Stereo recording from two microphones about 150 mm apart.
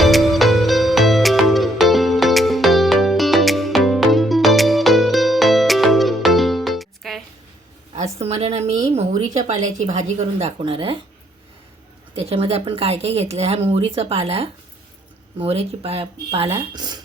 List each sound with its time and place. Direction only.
0.0 s music: centre (ahead or behind)
8.2 s a woman's voice: 45° right (ahead or behind)
9.0 s a sound: 50° right (ahead or behind)
9.6 s a woman's voice: 50° right (ahead or behind); by 11.0 s 35° right (ahead or behind)
12.1 s speech: 40° right (ahead or behind)